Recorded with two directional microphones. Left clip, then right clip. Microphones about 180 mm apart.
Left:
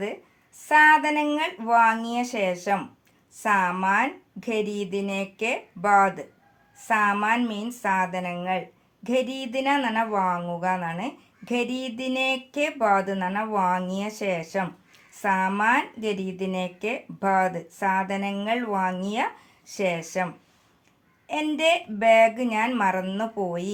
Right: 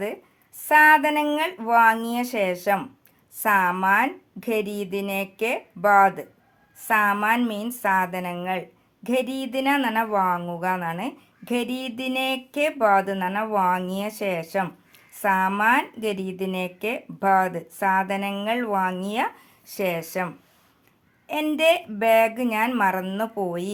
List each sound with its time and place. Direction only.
0.7 s speech: 25° right (ahead or behind)